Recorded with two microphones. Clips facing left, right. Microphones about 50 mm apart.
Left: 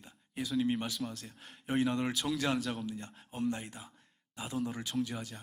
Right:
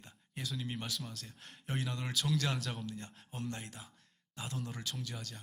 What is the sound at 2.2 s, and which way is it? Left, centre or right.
A man's voice, centre.